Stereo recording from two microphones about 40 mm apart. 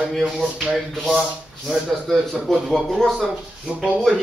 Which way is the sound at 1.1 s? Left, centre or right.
Centre.